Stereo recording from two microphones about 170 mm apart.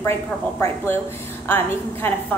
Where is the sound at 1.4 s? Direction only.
10° left (ahead or behind).